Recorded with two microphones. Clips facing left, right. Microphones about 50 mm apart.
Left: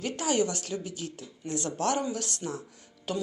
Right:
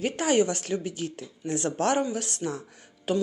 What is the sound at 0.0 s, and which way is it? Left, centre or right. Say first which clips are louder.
Speech: right 4 dB; right.